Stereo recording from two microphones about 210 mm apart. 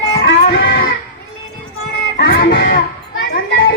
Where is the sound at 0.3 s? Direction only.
55° left (ahead or behind).